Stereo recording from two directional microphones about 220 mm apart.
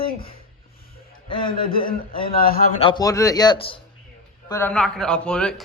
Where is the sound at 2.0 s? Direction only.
25° left (ahead or behind).